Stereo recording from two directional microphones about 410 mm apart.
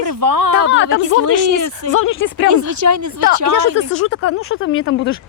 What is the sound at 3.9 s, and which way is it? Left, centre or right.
Speech, left.